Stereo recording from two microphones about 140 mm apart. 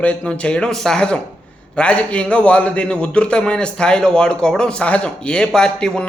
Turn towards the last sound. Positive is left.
turn(degrees=5)  # may be behind; listen again after turning